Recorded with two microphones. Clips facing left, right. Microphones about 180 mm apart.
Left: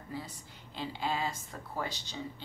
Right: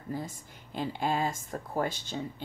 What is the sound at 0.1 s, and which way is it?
A woman's voice, 50° right (ahead or behind).